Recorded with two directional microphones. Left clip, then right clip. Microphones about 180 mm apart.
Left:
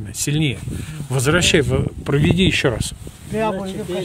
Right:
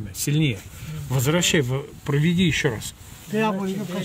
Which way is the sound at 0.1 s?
25° left (ahead or behind).